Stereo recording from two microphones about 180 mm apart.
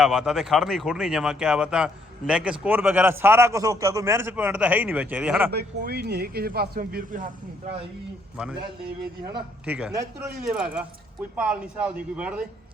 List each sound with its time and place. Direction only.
0.0 s speech: 5° right (ahead or behind)
5.5 s speech: 60° right (ahead or behind)
9.6 s speech: 5° right (ahead or behind)